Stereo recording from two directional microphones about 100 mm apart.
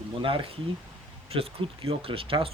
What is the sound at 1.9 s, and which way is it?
Speech, 70° right (ahead or behind).